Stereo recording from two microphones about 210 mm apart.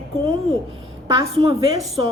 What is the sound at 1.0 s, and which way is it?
Speech, 20° right (ahead or behind).